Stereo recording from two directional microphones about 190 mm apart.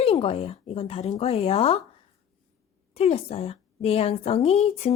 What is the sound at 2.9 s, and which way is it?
Speech, 30° left (ahead or behind).